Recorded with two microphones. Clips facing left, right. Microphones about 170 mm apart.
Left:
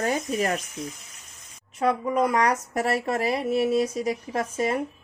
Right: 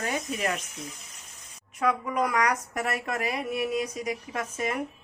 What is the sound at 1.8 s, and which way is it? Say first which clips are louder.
A woman's voice: left 4 dB; 25° left (ahead or behind).